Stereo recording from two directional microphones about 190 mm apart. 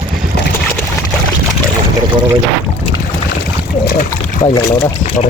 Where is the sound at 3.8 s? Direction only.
45° left (ahead or behind).